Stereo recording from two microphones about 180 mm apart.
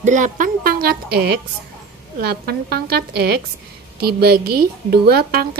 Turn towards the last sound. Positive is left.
turn(degrees=-60)  # may be behind; listen again after turning